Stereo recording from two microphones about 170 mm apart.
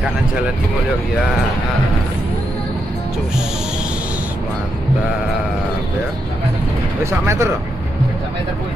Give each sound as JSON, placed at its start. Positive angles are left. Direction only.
{"t": 7.1, "sound": "speech", "side_deg": -15}